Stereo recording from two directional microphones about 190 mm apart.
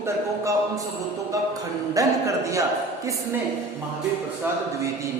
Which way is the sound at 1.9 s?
15° right (ahead or behind).